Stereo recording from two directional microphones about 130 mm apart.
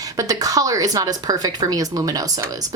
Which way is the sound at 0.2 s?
25° right (ahead or behind).